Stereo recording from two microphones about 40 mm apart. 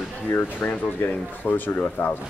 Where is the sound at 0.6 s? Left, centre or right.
Left.